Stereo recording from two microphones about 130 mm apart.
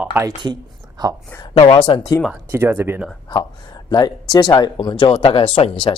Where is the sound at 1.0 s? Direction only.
35° right (ahead or behind).